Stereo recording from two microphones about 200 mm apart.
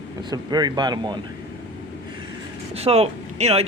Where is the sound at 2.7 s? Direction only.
30° right (ahead or behind).